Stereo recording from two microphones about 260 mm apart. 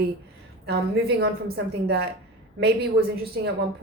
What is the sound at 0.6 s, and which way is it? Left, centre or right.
A woman's voice, right.